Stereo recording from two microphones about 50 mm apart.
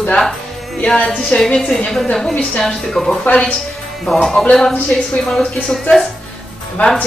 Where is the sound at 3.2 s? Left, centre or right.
Left.